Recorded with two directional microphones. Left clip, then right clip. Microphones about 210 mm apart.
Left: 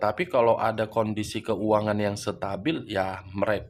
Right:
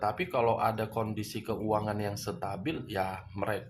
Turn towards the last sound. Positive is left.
turn(degrees=45)  # may be behind; listen again after turning